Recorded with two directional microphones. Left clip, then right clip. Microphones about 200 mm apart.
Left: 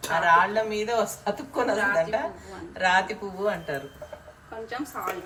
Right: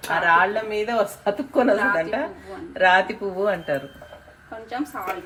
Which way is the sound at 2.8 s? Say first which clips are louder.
Right 5 dB; 30° right (ahead or behind).